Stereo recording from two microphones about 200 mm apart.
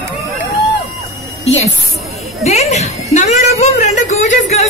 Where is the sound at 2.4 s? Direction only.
35° left (ahead or behind).